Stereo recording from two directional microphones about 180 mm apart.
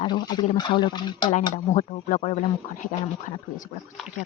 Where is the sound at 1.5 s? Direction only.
40° left (ahead or behind).